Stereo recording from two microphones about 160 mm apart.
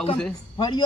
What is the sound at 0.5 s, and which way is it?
Speech, 30° left (ahead or behind).